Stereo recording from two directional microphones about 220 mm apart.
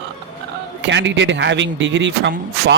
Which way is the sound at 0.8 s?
55° right (ahead or behind).